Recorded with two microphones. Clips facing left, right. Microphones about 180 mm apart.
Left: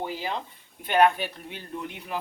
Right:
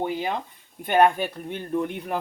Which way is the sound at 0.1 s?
55° right (ahead or behind).